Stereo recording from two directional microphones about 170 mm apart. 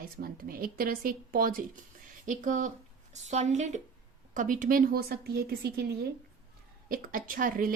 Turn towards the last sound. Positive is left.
turn(degrees=-55)  # may be behind; listen again after turning